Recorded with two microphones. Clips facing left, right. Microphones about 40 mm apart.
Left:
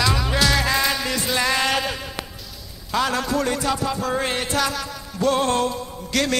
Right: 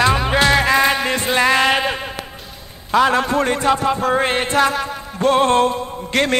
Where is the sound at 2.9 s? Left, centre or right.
Right.